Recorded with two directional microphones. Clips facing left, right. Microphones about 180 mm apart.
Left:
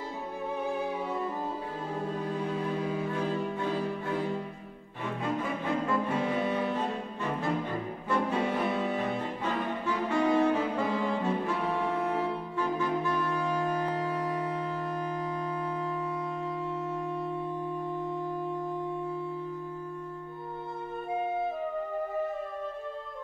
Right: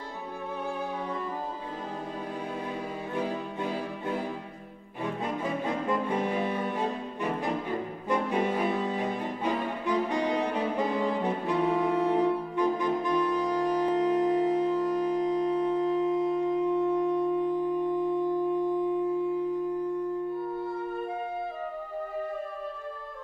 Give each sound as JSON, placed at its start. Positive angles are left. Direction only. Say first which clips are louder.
{"t": 8.1, "sound": "music", "louder": "right 1 dB", "side_deg": -15}
{"t": 8.9, "sound": "saxophone", "louder": "right 1 dB", "side_deg": -15}
{"t": 15.9, "sound": "music", "louder": "right 8 dB", "side_deg": -20}